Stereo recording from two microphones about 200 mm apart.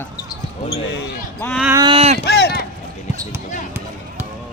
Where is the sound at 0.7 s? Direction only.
60° left (ahead or behind).